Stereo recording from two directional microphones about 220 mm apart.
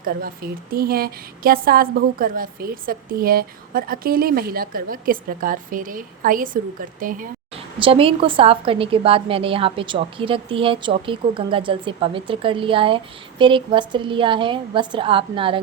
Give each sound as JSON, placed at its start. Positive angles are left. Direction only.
{"t": 0.0, "sound": "a woman's voice", "side_deg": -40}
{"t": 7.5, "sound": "a woman's voice", "side_deg": -25}